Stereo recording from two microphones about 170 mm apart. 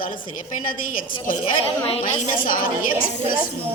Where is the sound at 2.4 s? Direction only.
55° left (ahead or behind).